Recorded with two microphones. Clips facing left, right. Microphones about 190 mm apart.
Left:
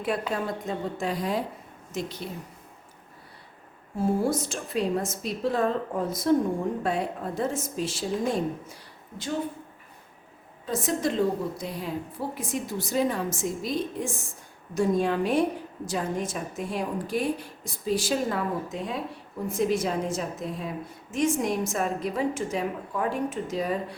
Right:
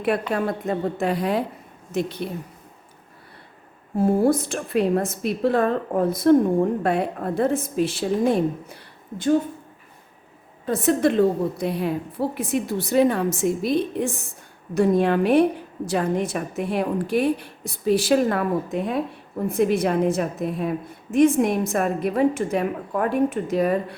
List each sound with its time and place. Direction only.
0.0 s a woman's voice: 65° right (ahead or behind)
3.9 s a woman's voice: 55° right (ahead or behind)
10.7 s a woman's voice: 60° right (ahead or behind)